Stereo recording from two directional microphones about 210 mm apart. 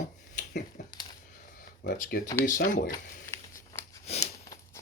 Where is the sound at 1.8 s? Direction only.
45° left (ahead or behind).